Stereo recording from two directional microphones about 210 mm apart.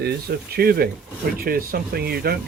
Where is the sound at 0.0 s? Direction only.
50° right (ahead or behind).